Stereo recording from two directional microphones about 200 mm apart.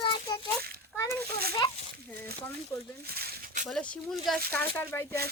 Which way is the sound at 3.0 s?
50° right (ahead or behind).